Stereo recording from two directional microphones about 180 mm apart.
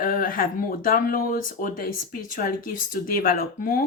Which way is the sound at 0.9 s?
50° left (ahead or behind).